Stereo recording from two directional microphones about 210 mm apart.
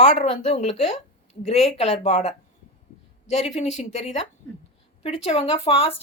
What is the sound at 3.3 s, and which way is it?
Speech, 30° left (ahead or behind).